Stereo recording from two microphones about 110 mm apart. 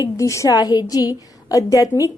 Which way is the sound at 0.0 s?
30° left (ahead or behind).